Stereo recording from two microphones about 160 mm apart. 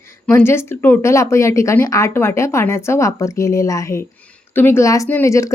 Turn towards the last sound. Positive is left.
turn(degrees=20)  # may be behind; listen again after turning